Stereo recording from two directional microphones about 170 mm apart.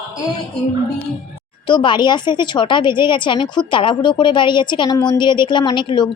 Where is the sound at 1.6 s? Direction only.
30° left (ahead or behind).